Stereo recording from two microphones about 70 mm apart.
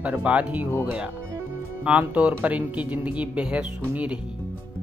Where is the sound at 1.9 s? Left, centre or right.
Centre.